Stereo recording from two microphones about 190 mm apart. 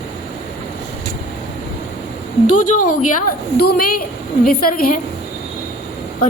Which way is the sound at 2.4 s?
40° left (ahead or behind).